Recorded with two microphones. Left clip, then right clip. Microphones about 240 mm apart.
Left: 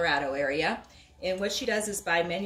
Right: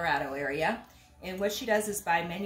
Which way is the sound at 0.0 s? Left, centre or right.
Centre.